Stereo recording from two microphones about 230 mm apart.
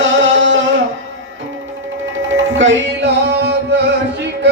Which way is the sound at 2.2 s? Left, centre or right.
Right.